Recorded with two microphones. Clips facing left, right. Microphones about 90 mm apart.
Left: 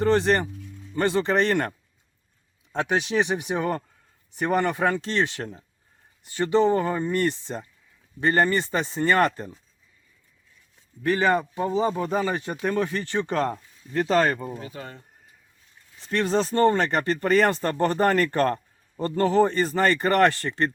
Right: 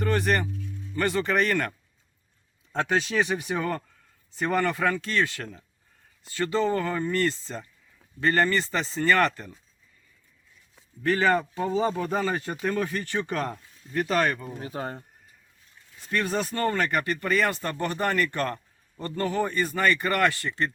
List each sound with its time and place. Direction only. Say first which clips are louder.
0.0 s speech: left 4 dB; 25° left (ahead or behind)
2.7 s speech: left 1 dB; 15° left (ahead or behind)
11.0 s speech: left 1 dB; 20° left (ahead or behind)
14.6 s speech: right 4 dB; 40° right (ahead or behind)
16.0 s speech: left 4 dB; 25° left (ahead or behind)